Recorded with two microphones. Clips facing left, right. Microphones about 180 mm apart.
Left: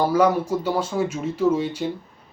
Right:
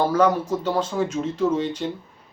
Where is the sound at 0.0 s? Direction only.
10° left (ahead or behind).